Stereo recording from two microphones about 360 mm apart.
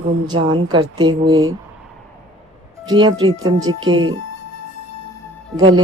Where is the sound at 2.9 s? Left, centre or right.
Centre.